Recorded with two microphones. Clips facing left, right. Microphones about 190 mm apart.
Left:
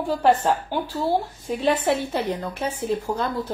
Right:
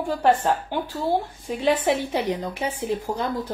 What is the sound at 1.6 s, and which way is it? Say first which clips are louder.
A woman's voice: even; 15° right (ahead or behind).